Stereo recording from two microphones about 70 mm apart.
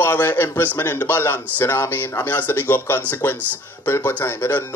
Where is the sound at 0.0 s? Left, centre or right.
Left.